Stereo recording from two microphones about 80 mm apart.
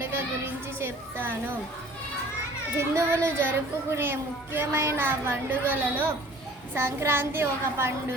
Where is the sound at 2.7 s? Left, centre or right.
Right.